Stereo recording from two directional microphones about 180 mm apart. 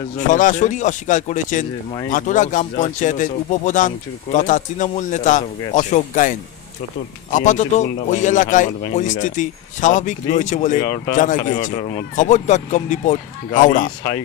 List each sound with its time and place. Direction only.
0.3 s speech: 45° left (ahead or behind)
10.8 s speech: 20° left (ahead or behind)
11.1 s speech: 45° left (ahead or behind)
11.7 s speech: 30° left (ahead or behind)
12.2 s speech: 40° left (ahead or behind)
14.0 s speech: 15° left (ahead or behind)